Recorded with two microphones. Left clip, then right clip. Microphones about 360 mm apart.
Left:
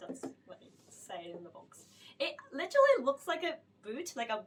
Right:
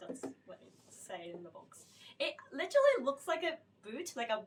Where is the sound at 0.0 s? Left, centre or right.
Centre.